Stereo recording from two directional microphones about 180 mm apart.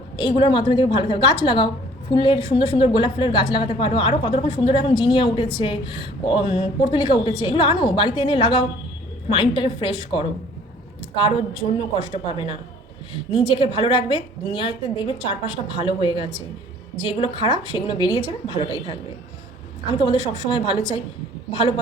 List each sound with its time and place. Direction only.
0.2 s a woman's voice: 30° left (ahead or behind)